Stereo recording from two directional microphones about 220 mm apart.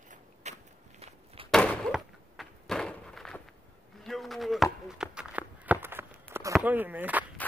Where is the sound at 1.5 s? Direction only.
5° left (ahead or behind).